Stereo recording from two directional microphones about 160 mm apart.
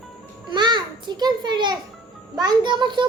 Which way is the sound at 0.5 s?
30° right (ahead or behind).